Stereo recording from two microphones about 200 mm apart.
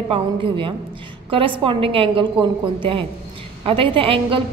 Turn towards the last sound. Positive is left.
turn(degrees=-25)  # may be behind; listen again after turning